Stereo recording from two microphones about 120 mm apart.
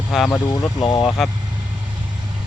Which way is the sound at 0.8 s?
35° left (ahead or behind).